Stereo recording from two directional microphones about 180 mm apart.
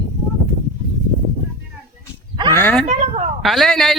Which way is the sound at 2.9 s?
40° right (ahead or behind).